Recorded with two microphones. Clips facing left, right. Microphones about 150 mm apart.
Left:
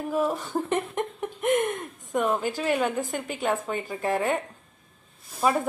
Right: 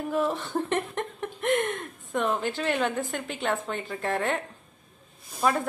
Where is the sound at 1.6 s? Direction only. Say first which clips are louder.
Left 2 dB; 15° left (ahead or behind).